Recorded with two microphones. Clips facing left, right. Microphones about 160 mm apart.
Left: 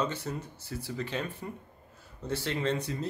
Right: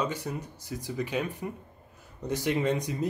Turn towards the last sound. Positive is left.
turn(degrees=-15)  # may be behind; listen again after turning